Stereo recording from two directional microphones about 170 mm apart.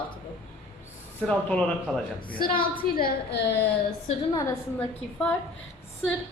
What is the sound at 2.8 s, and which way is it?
Speech, 65° left (ahead or behind).